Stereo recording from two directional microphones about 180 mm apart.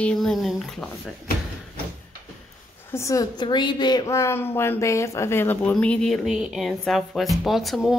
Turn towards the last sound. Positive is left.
turn(degrees=0)  # may be behind; listen again after turning